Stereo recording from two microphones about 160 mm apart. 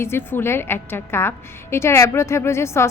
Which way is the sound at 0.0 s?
15° left (ahead or behind).